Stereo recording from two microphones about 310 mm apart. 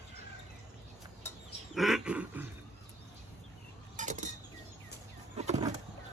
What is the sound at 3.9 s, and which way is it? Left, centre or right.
Vehicle, right.